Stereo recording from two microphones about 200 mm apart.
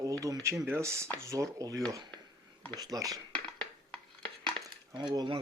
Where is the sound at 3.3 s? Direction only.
5° left (ahead or behind).